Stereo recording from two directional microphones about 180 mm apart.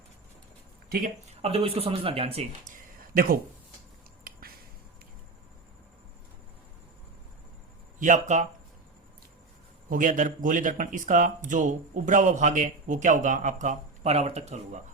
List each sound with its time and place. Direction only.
0.9 s speech: 55° right (ahead or behind)
1.4 s speech: 35° right (ahead or behind)
4.2 s a sound: 55° right (ahead or behind)
7.9 s speech: 45° right (ahead or behind)
9.9 s speech: 45° right (ahead or behind)